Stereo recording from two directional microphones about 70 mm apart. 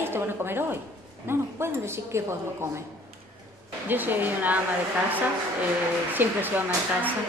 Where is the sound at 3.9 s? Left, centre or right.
Right.